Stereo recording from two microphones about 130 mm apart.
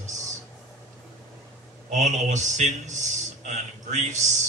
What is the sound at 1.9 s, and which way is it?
A man's voice, 65° right (ahead or behind).